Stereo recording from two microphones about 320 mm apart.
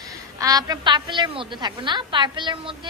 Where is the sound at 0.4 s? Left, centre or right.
Centre.